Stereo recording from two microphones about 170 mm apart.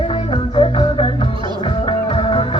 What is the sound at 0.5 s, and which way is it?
Music, 30° left (ahead or behind).